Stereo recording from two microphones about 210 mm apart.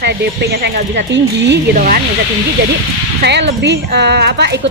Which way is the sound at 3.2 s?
55° right (ahead or behind).